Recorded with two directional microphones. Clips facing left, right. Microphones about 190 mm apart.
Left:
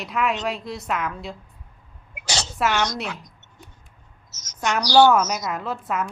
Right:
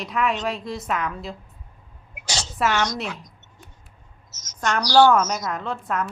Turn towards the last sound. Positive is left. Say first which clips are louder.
# even
turn(degrees=5)  # may be behind; listen again after turning